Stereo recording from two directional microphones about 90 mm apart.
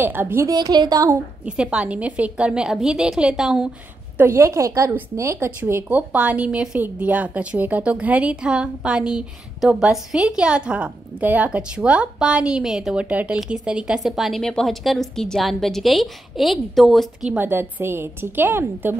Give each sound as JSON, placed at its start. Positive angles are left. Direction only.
{"t": 0.0, "sound": "speech", "side_deg": -20}
{"t": 0.5, "sound": "a woman's voice", "side_deg": -50}
{"t": 1.4, "sound": "a woman's voice", "side_deg": -10}
{"t": 4.2, "sound": "a woman's voice", "side_deg": -30}
{"t": 17.4, "sound": "speech", "side_deg": -25}